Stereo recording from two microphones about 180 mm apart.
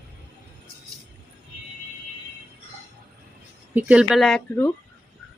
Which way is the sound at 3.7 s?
5° right (ahead or behind).